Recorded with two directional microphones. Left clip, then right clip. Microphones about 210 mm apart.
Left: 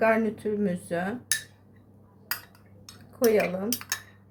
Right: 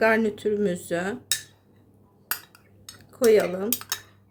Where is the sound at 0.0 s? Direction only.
30° right (ahead or behind).